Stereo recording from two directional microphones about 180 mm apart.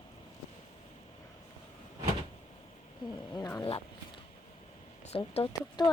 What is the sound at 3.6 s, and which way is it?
Speech, 30° left (ahead or behind).